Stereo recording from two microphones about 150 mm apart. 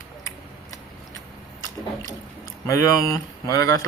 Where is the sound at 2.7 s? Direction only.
20° left (ahead or behind).